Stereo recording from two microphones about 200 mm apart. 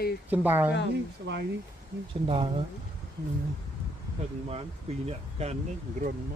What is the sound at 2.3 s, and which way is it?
Speech, 25° right (ahead or behind).